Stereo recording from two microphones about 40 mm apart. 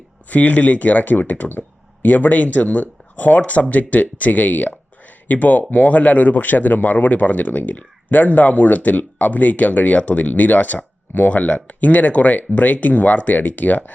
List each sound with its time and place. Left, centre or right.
0.3 s speech: left